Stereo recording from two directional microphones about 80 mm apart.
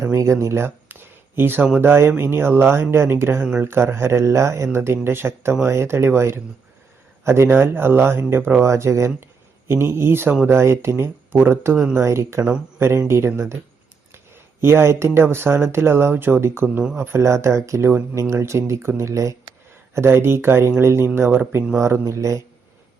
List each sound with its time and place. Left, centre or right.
0.0 s speech: right
14.6 s speech: right